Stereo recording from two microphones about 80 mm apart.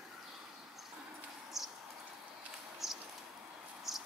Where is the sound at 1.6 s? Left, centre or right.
Centre.